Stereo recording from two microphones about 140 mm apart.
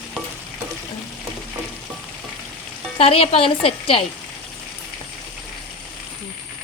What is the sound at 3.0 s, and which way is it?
Speech, 45° left (ahead or behind).